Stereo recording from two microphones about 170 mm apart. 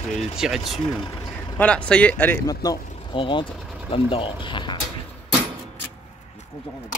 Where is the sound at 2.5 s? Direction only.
25° left (ahead or behind).